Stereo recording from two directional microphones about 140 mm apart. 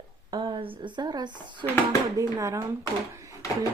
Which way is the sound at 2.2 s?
20° right (ahead or behind).